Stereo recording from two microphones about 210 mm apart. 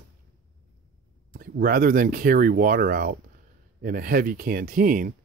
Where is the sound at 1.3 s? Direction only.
45° right (ahead or behind).